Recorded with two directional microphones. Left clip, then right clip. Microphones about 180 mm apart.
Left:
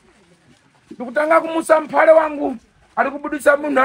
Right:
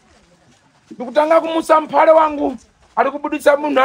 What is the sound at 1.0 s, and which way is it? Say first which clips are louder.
Speech: right 2 dB; 40° right (ahead or behind).